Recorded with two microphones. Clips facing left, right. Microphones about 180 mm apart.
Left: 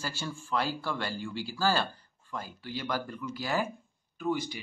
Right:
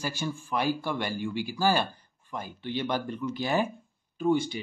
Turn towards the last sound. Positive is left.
turn(degrees=-25)  # may be behind; listen again after turning